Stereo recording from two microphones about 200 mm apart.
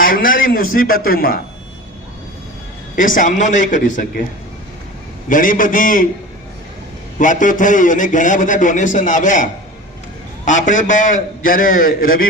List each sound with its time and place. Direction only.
0.0 s a man's voice: 45° left (ahead or behind)
2.9 s a man's voice: 40° left (ahead or behind)
5.3 s a man's voice: 40° left (ahead or behind)
7.2 s a man's voice: 40° left (ahead or behind)